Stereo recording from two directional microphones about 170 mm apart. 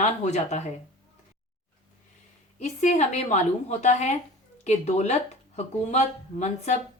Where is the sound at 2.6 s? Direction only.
45° left (ahead or behind).